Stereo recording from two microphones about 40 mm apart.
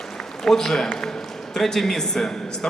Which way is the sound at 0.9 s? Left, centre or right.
Centre.